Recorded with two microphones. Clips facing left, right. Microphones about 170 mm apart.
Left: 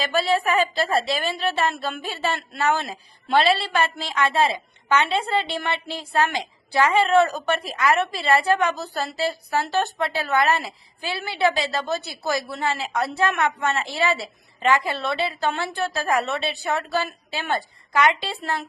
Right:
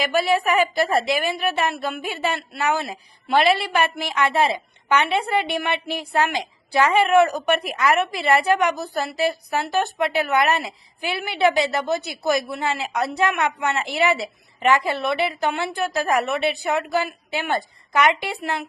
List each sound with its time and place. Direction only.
0.0 s speech: 15° right (ahead or behind)